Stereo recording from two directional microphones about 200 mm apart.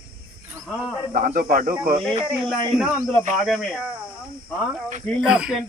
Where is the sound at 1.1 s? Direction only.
45° right (ahead or behind).